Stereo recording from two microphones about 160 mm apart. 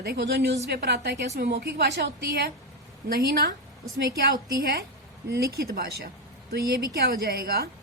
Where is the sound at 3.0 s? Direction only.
75° right (ahead or behind).